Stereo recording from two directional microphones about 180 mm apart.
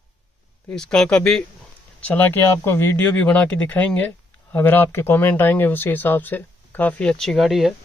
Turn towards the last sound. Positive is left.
turn(degrees=0)  # may be behind; listen again after turning